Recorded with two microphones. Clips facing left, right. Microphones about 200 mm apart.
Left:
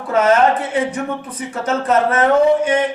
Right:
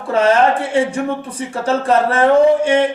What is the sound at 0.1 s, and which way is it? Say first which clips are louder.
Speech: even; 30° right (ahead or behind).